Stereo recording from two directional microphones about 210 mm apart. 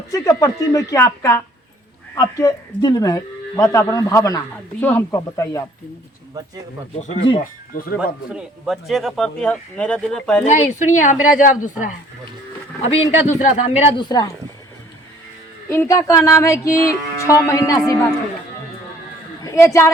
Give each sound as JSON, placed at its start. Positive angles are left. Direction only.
{"t": 0.1, "sound": "speech", "side_deg": 15}
{"t": 7.0, "sound": "a man's voice", "side_deg": 35}
{"t": 7.9, "sound": "speech", "side_deg": -5}
{"t": 10.4, "sound": "a man's voice", "side_deg": 35}
{"t": 15.7, "sound": "speech", "side_deg": 15}
{"t": 19.4, "sound": "a woman's voice", "side_deg": 15}